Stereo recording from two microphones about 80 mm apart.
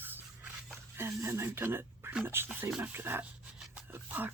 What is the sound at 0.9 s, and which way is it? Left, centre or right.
Speech, right.